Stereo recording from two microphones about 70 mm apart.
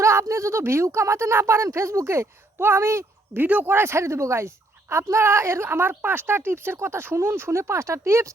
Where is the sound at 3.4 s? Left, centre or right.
Right.